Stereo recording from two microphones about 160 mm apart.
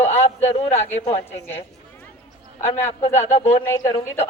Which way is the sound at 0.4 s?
45° left (ahead or behind).